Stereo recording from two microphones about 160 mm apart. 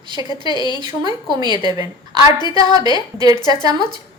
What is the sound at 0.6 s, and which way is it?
Speech, 25° left (ahead or behind).